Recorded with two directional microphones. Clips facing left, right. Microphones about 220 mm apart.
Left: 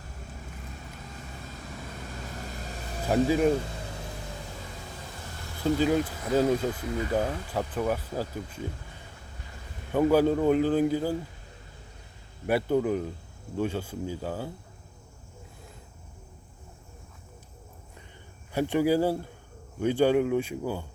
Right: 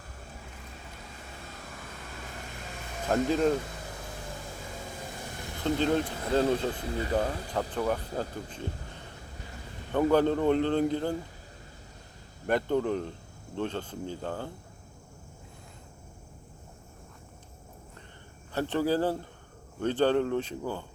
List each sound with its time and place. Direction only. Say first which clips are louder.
3.1 s speech: left 2 dB; 10° left (ahead or behind)
5.6 s speech: left 2 dB; 10° left (ahead or behind)
6.8 s speech: left 2 dB; 30° right (ahead or behind)
7.1 s speech: even; 5° left (ahead or behind)
9.9 s speech: left 2 dB; 10° left (ahead or behind)
12.5 s speech: left 2 dB; 10° left (ahead or behind)
18.5 s speech: left 3 dB; 10° left (ahead or behind)